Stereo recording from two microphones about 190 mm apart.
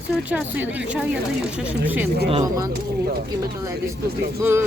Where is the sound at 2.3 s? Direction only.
25° right (ahead or behind).